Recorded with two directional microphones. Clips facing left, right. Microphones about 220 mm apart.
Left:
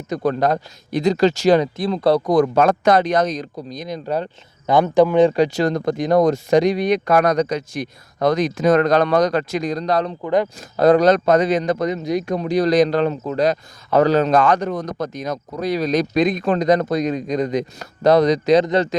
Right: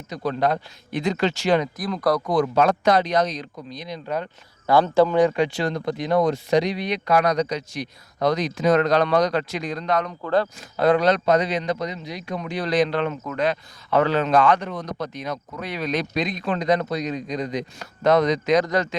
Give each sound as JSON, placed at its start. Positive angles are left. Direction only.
{"t": 0.1, "sound": "speech", "side_deg": 50}
{"t": 2.3, "sound": "speech", "side_deg": 50}
{"t": 4.6, "sound": "speech", "side_deg": 20}
{"t": 5.3, "sound": "speech", "side_deg": 40}
{"t": 10.2, "sound": "speech", "side_deg": 15}
{"t": 10.6, "sound": "speech", "side_deg": 40}